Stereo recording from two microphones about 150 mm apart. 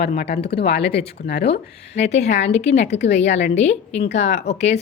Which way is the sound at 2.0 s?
45° left (ahead or behind).